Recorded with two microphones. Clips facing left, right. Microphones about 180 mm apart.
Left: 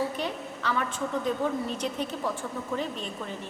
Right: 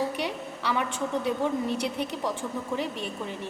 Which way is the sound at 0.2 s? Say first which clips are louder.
Right 1 dB; 10° right (ahead or behind).